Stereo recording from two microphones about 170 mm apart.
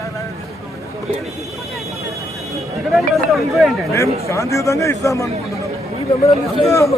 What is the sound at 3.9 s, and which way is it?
A man's voice, 20° left (ahead or behind).